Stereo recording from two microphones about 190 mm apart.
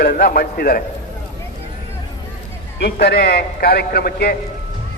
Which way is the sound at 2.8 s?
55° left (ahead or behind).